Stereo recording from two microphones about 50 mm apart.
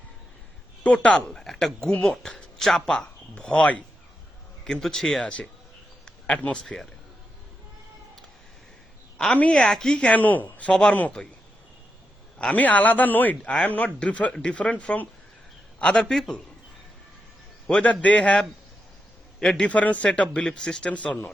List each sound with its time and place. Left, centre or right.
0.9 s speech: left; by 5.0 s centre
5.2 s a man's voice: left
6.1 s a sound: centre
6.6 s speech: centre
9.5 s speech: centre
10.1 s speech: left
10.7 s speech: centre
12.4 s a man's voice: left; by 16.3 s centre
17.7 s a man's voice: left
19.4 s a man's voice: centre
19.6 s a man's voice: left
20.2 s speech: centre
20.9 s a man's voice: left